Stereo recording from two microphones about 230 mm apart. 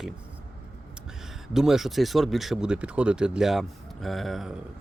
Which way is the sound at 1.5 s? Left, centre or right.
Centre.